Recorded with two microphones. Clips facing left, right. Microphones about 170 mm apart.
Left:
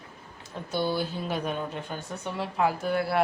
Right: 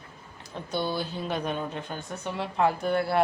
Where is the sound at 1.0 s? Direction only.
5° left (ahead or behind).